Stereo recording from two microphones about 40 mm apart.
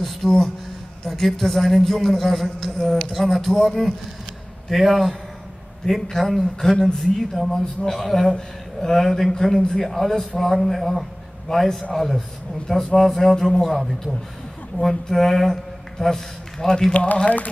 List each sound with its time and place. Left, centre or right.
0.0 s a sound: centre
1.0 s a man's voice: centre
13.7 s a man's voice: centre
16.9 s speech: left